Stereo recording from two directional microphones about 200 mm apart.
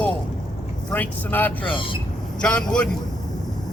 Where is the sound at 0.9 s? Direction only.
10° left (ahead or behind).